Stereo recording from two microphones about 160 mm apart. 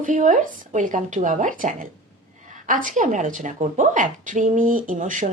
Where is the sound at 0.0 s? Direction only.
55° right (ahead or behind).